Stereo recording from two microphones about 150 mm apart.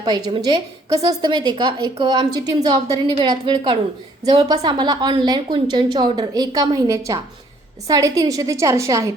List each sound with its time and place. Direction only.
0.0 s a woman's voice: 30° right (ahead or behind)